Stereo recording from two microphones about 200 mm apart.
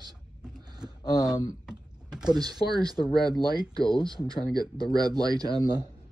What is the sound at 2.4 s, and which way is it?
Speech, 20° right (ahead or behind).